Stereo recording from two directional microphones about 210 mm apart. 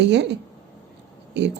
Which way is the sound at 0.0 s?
55° right (ahead or behind).